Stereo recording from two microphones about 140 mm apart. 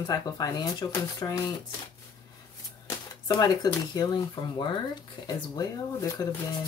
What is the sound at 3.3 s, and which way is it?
Speech, 25° left (ahead or behind).